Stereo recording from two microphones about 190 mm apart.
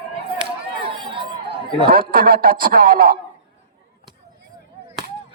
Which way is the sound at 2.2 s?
50° right (ahead or behind).